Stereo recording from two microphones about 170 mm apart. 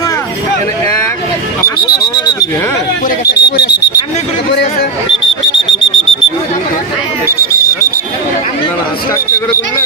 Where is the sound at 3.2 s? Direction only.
70° left (ahead or behind).